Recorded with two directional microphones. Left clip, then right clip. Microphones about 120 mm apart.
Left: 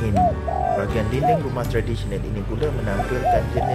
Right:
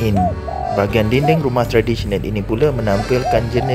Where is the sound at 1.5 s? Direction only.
60° right (ahead or behind).